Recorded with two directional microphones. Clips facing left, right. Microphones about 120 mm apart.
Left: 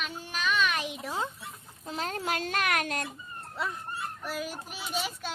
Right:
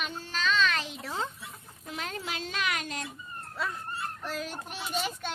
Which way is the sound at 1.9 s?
35° left (ahead or behind).